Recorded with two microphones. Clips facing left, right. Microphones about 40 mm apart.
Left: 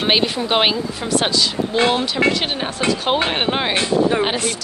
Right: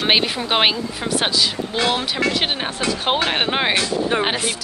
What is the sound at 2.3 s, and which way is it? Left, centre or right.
Speech, right.